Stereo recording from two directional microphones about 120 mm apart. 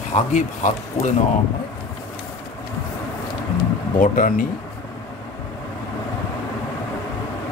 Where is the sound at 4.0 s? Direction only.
90° left.